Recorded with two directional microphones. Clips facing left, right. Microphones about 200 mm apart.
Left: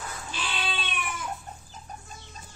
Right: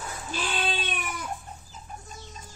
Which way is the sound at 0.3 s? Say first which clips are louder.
Right 5 dB; 45° right (ahead or behind).